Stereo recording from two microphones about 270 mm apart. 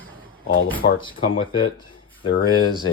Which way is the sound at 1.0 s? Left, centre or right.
Centre.